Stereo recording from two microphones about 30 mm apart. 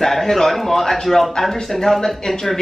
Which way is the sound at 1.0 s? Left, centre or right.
Centre.